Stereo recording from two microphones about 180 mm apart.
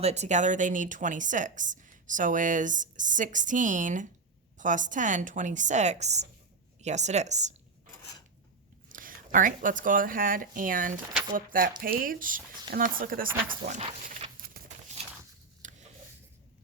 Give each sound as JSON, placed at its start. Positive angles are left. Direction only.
{"t": 0.0, "sound": "a woman's voice", "side_deg": -40}
{"t": 8.9, "sound": "speech", "side_deg": -50}
{"t": 14.5, "sound": "horse", "side_deg": -60}
{"t": 14.9, "sound": "a sound", "side_deg": -40}